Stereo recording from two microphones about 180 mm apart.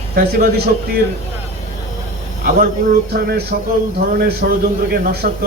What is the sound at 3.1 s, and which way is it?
A man's voice, 65° right (ahead or behind).